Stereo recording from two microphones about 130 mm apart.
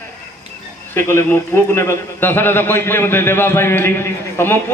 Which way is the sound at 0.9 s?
15° left (ahead or behind).